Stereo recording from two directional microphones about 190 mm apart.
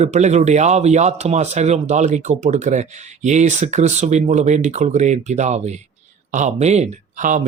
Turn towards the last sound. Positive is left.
turn(degrees=-40)  # may be behind; listen again after turning